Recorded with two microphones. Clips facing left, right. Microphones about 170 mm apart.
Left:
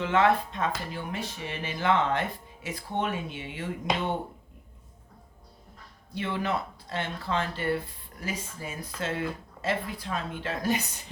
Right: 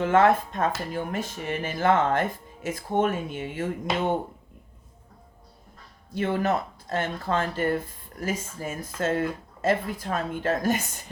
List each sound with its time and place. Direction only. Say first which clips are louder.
0.0 s speech: right 4 dB; 45° right (ahead or behind)
6.1 s speech: right 5 dB; 45° right (ahead or behind)